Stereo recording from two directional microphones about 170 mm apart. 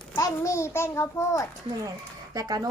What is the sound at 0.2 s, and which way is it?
A child's voice, 20° left (ahead or behind).